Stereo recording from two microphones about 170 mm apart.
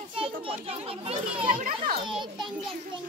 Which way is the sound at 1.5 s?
55° right (ahead or behind).